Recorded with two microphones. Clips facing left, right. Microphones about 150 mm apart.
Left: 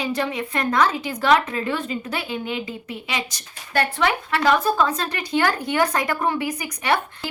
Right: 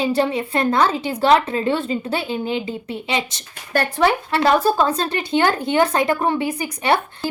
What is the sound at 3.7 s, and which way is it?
A woman's voice, 40° right (ahead or behind).